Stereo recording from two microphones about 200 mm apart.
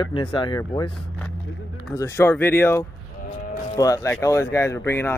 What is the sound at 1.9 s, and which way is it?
Speech, 15° left (ahead or behind).